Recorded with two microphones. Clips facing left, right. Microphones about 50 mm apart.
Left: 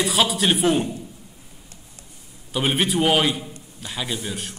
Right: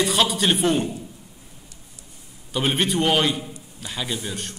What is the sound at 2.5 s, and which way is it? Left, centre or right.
A man's voice, centre.